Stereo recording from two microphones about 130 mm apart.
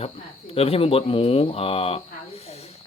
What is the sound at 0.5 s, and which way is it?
Speech, 50° left (ahead or behind).